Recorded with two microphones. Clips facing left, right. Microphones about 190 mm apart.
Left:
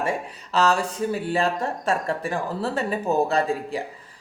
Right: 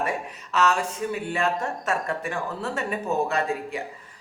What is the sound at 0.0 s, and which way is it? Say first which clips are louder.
Speech: left 2 dB; 30° left (ahead or behind).